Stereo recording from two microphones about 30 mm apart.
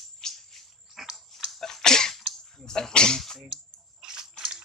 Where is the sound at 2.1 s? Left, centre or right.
Centre.